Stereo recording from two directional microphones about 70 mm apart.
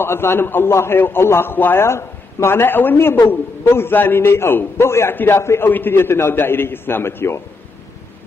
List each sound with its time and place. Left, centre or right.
0.0 s a man's voice: left